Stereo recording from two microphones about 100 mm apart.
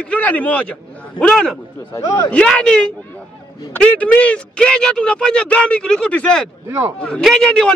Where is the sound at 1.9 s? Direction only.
35° left (ahead or behind).